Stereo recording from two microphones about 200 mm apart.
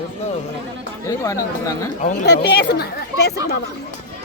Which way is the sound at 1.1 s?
15° left (ahead or behind).